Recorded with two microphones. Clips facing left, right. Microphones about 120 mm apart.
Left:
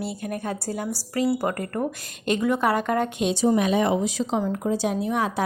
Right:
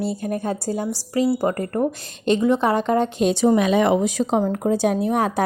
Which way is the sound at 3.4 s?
90° right.